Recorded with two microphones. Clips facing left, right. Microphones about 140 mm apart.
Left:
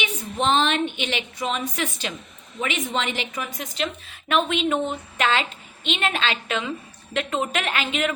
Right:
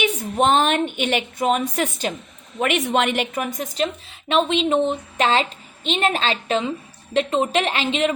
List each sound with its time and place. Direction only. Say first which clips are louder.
0.0 s a woman's voice: right 5 dB; 50° right (ahead or behind)
2.6 s a woman's voice: right 6 dB; 60° right (ahead or behind); by 4.1 s 40° right (ahead or behind)
4.1 s speech: right 2 dB; 25° right (ahead or behind)